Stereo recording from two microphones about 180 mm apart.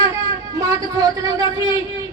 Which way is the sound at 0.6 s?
20° right (ahead or behind).